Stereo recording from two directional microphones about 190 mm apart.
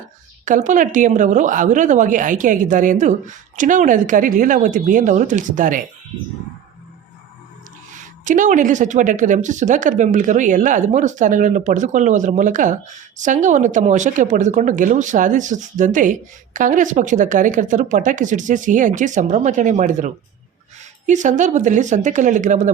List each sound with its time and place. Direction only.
0.4 s a woman's voice: 40° right (ahead or behind)
7.9 s speech: 40° right (ahead or behind)
21.1 s speech: 40° right (ahead or behind)